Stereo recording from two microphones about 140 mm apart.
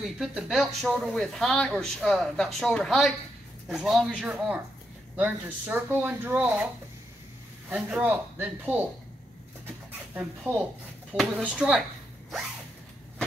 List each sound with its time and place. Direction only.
0.0 s speech: 5° right (ahead or behind)
7.7 s speech: 10° right (ahead or behind)
10.4 s speech: 15° right (ahead or behind)